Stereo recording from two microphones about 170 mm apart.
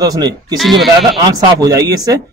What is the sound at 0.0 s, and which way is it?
Speech, 25° right (ahead or behind).